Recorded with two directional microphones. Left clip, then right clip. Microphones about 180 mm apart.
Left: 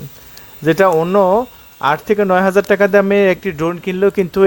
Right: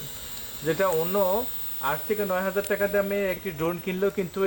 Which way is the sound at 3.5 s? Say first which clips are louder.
Left 10 dB; 25° left (ahead or behind).